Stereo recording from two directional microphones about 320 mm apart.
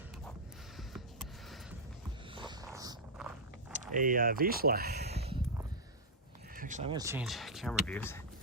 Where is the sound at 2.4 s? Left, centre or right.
Centre.